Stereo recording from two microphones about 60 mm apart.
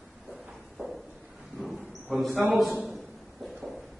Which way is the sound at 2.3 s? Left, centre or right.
Right.